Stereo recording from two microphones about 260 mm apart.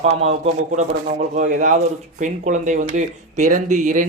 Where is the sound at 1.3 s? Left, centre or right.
Right.